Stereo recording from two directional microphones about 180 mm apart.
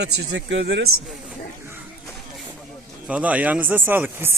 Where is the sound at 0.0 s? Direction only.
70° right (ahead or behind).